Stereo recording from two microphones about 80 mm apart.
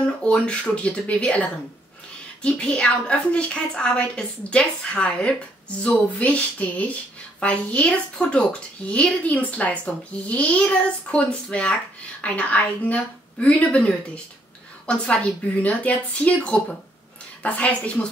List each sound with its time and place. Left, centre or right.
0.0 s speech: centre
2.4 s speech: centre